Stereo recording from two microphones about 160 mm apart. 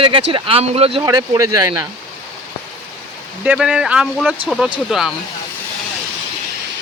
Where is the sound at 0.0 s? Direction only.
35° right (ahead or behind).